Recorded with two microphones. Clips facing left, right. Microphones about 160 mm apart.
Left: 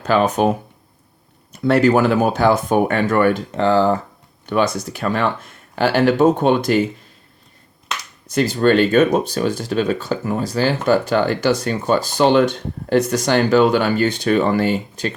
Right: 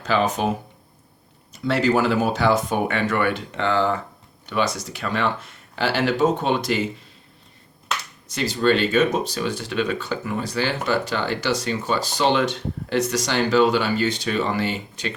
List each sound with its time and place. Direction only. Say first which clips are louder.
0.0 s speech: left 5 dB; 55° left (ahead or behind)
1.5 s speech: left 6 dB; 55° left (ahead or behind); by 4.0 s 40° left (ahead or behind)
4.4 s speech: left 5 dB; 50° left (ahead or behind)
8.3 s speech: left 5 dB; 50° left (ahead or behind)